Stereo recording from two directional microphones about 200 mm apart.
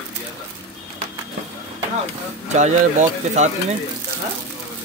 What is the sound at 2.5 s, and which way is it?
Speech, 35° right (ahead or behind).